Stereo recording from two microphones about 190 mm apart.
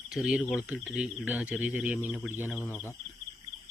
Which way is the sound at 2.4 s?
10° left (ahead or behind).